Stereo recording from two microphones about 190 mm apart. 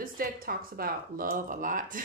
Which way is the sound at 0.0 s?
50° right (ahead or behind).